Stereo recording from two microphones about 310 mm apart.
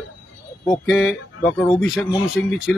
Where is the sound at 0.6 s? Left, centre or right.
Centre.